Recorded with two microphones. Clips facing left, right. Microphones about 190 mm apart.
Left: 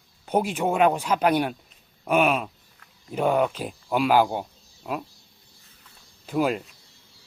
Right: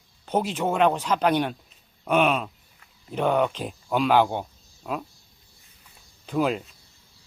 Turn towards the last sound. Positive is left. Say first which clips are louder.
# even
turn(degrees=5)  # may be behind; listen again after turning